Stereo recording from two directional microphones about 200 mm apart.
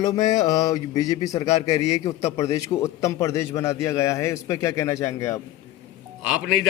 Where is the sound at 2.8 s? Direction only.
15° left (ahead or behind).